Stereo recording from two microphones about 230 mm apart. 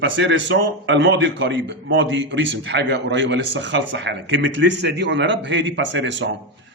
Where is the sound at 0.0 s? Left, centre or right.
Right.